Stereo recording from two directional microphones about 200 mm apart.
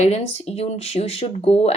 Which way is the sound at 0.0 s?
30° left (ahead or behind).